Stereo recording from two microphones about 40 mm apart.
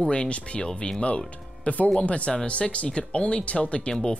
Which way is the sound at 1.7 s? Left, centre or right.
Left.